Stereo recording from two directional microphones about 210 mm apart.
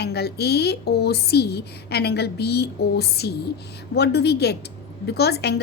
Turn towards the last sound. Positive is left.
turn(degrees=50)  # may be behind; listen again after turning